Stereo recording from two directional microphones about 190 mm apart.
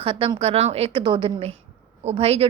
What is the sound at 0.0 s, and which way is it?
A woman's voice, 30° right (ahead or behind).